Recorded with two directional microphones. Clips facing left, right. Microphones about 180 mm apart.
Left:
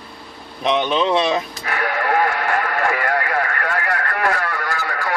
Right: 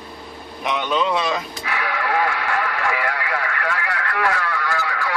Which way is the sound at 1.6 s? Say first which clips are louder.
Left 2 dB; 50° left (ahead or behind).